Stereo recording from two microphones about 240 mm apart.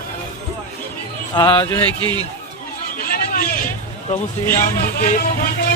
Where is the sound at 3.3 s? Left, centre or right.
Left.